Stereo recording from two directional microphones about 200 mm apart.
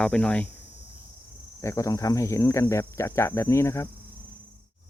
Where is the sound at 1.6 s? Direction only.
15° left (ahead or behind).